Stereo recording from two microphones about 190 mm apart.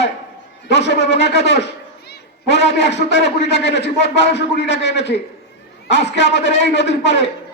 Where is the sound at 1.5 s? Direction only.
60° left (ahead or behind).